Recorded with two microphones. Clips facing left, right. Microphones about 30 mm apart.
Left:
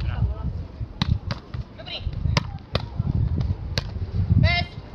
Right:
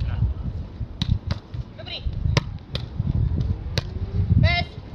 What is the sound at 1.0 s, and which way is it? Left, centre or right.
Basketball bounce, left.